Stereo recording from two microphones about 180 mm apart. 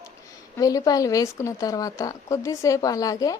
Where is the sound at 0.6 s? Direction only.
20° left (ahead or behind).